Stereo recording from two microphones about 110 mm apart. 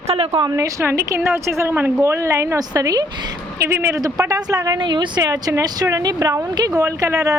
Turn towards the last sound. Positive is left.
turn(degrees=-30)  # may be behind; listen again after turning